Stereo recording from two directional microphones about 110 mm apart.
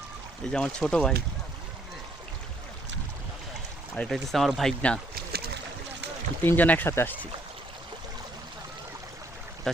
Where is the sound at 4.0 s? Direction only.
15° left (ahead or behind).